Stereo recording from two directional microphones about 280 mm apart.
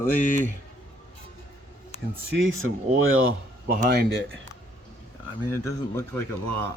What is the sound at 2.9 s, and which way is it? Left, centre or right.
Speech, right.